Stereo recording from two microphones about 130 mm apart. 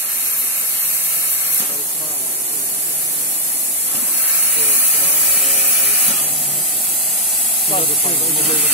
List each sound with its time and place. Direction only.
7.7 s speech: 45° left (ahead or behind)